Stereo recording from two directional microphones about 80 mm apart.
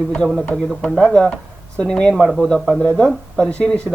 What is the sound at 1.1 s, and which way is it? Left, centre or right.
Speech, centre.